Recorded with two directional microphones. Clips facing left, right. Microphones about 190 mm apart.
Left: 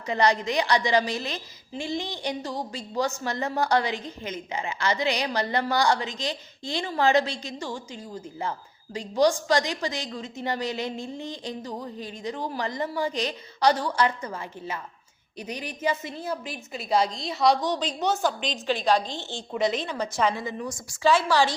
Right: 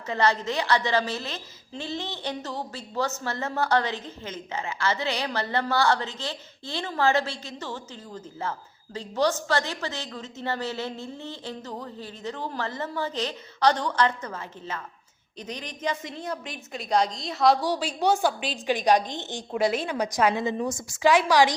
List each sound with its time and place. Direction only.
0.1 s a woman's voice: 15° left (ahead or behind); by 20.4 s 15° right (ahead or behind)
20.4 s a woman's voice: 25° right (ahead or behind)